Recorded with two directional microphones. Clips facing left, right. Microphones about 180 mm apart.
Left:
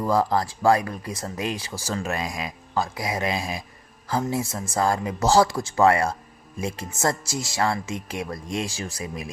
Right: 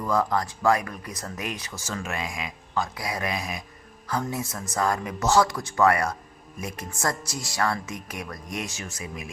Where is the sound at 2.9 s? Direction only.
25° left (ahead or behind).